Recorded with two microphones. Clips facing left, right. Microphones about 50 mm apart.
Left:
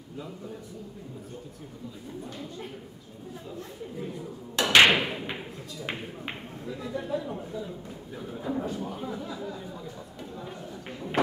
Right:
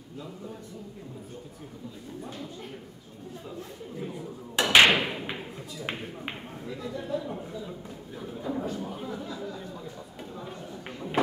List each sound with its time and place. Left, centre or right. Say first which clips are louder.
3.5 s speech: left 2 dB; centre
4.6 s thump: even; centre
5.8 s speech: even; centre